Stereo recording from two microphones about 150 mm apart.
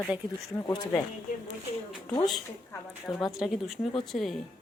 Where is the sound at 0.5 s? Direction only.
25° left (ahead or behind).